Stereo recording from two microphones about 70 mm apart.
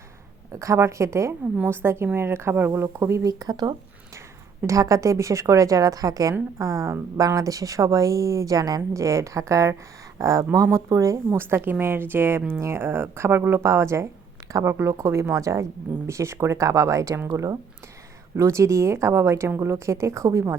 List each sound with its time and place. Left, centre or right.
0.5 s a woman's voice: right
3.2 s speech: right
4.6 s speech: right
6.6 s speech: right
8.9 s speech: right
11.3 s a woman's voice: right
13.7 s speech: right